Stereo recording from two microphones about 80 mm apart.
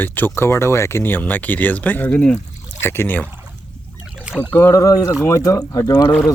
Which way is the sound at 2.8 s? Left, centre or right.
Left.